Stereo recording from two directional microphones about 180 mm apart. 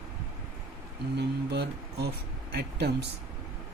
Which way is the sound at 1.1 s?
65° right (ahead or behind).